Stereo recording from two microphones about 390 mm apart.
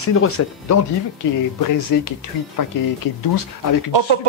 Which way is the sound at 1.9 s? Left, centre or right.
Left.